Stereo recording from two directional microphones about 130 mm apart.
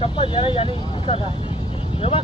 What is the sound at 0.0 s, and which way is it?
Speech, 40° left (ahead or behind).